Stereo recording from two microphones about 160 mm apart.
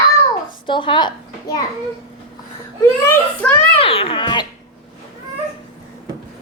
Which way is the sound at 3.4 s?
10° left (ahead or behind).